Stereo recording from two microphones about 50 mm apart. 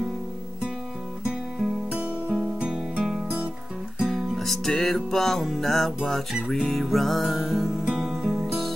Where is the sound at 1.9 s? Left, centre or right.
Right.